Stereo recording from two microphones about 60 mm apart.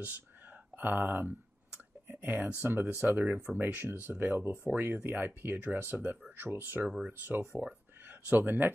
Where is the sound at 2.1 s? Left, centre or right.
Right.